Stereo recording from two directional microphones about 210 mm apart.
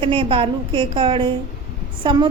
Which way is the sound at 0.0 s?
25° right (ahead or behind).